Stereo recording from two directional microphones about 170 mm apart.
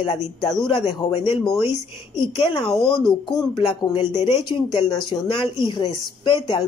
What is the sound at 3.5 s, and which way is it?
Speech, 35° left (ahead or behind).